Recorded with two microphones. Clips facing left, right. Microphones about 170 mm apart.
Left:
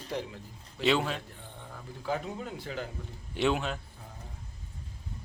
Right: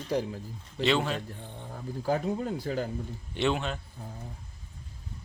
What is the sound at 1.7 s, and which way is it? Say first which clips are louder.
Speech: right 5 dB; 40° right (ahead or behind).